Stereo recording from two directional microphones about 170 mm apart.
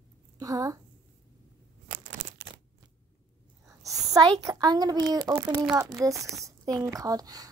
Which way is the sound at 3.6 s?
20° right (ahead or behind).